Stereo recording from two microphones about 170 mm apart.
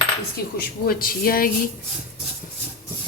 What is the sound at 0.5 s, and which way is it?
Speech, 60° left (ahead or behind).